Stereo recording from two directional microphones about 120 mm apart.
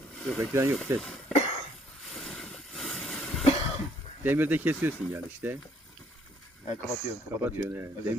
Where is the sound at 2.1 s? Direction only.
Centre (ahead or behind).